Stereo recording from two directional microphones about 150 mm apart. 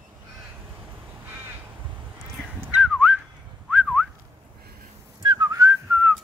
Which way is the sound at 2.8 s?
5° right (ahead or behind).